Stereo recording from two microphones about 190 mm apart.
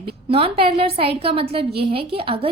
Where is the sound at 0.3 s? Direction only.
30° right (ahead or behind).